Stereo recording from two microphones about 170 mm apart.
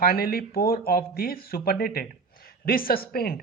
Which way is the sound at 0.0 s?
60° left (ahead or behind).